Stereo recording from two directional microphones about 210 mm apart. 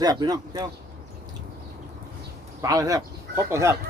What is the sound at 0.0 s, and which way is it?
Speech, 20° right (ahead or behind).